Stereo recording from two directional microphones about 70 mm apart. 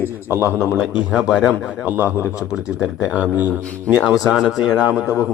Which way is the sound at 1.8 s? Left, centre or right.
Right.